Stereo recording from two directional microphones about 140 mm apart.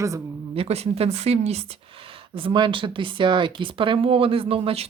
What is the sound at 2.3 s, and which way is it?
Speech, 35° right (ahead or behind).